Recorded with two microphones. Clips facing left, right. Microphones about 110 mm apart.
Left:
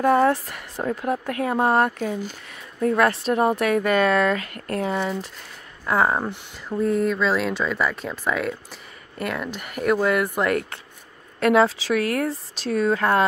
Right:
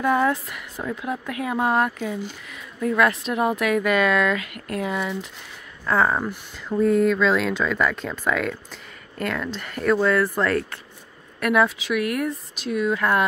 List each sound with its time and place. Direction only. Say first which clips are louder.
0.0 s speech: left 3 dB; 45° left (ahead or behind)
5.9 s speech: even; 20° left (ahead or behind)
6.9 s speech: right 2 dB; centre (ahead or behind); by 13.2 s 35° left (ahead or behind)